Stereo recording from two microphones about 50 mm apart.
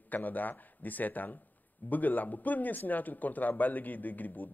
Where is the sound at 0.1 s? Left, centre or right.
Left.